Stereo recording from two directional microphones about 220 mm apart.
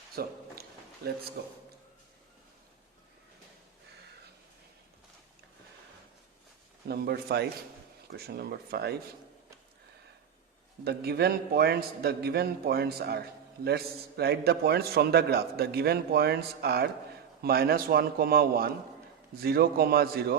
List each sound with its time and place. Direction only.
0.2 s a man's voice: 45° right (ahead or behind)
6.8 s a man's voice: 45° right (ahead or behind)
10.8 s a man's voice: 45° right (ahead or behind)